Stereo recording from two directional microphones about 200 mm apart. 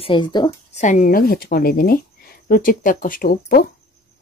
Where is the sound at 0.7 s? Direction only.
40° left (ahead or behind).